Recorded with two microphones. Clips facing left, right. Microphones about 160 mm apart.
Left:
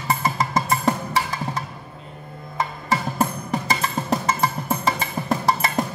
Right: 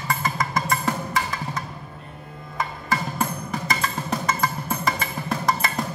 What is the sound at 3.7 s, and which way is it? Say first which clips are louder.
Music: left 3 dB; 30° left (ahead or behind).